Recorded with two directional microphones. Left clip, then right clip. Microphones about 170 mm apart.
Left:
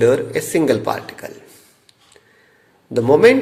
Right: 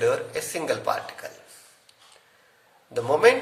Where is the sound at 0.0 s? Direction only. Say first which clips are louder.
Left 9 dB; 25° left (ahead or behind).